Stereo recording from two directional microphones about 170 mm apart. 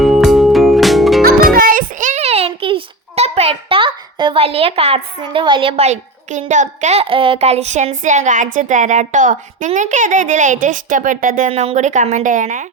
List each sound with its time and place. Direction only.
0.0 s music: centre (ahead or behind)
1.2 s music: 60° right (ahead or behind)
1.5 s a sound: 55° right (ahead or behind); by 5.0 s 35° right (ahead or behind)
5.2 s a woman's voice: 30° right (ahead or behind); by 12.6 s 45° right (ahead or behind)